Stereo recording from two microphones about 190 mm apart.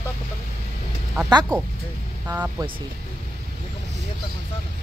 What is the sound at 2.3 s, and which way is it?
Speech, 10° right (ahead or behind).